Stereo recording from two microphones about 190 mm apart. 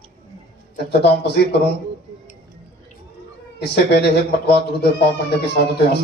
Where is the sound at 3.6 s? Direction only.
60° left (ahead or behind).